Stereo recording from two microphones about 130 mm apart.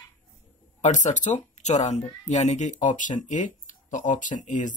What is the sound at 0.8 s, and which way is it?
Speech, 65° left (ahead or behind).